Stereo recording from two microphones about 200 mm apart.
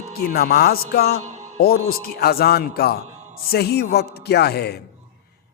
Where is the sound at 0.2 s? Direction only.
50° left (ahead or behind).